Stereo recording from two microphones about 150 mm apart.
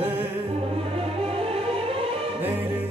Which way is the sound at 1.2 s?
40° right (ahead or behind).